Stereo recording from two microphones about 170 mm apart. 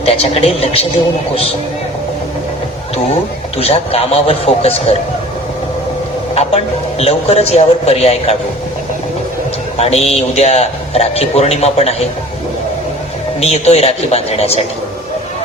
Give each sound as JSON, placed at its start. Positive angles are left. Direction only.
{"t": 0.0, "sound": "a man's voice", "side_deg": 35}
{"t": 3.6, "sound": "a man's voice", "side_deg": 35}
{"t": 7.0, "sound": "a man's voice", "side_deg": 35}
{"t": 9.7, "sound": "a man's voice", "side_deg": 35}
{"t": 13.4, "sound": "a man's voice", "side_deg": 40}